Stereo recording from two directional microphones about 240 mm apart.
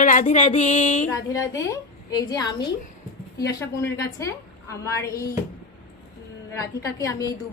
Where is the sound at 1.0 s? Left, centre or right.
Centre.